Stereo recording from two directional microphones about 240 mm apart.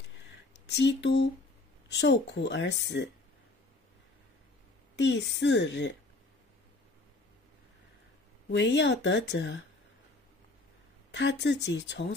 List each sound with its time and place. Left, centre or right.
0.7 s speech: left
4.9 s speech: left
8.5 s speech: left
11.1 s speech: left